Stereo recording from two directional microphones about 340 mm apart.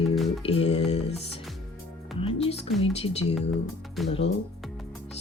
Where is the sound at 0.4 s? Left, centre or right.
Centre.